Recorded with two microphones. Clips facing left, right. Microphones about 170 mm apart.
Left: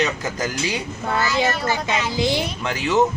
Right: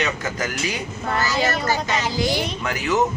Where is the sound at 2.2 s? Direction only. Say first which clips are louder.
Left 1 dB; 25° left (ahead or behind).